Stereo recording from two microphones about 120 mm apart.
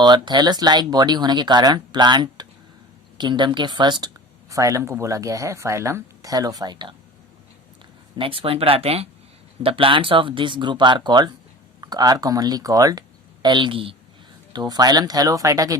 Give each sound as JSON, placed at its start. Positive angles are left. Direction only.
{"t": 0.0, "sound": "speech", "side_deg": -40}
{"t": 4.4, "sound": "speech", "side_deg": -25}
{"t": 8.2, "sound": "speech", "side_deg": -50}
{"t": 14.5, "sound": "speech", "side_deg": -35}